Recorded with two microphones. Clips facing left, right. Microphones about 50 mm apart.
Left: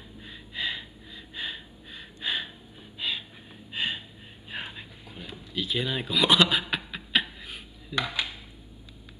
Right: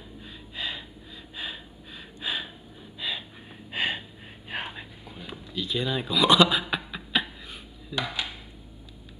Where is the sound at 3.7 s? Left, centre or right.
Right.